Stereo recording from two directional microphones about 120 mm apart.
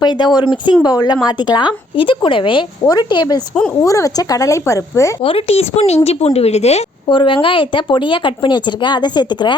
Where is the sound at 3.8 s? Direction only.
25° left (ahead or behind).